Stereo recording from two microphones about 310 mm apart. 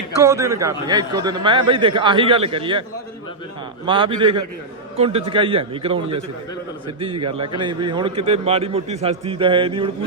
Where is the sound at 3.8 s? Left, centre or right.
Centre.